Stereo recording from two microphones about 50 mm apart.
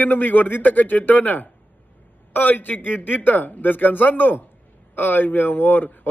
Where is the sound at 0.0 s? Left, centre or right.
Left.